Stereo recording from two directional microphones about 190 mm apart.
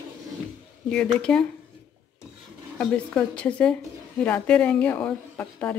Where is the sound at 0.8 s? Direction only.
5° left (ahead or behind).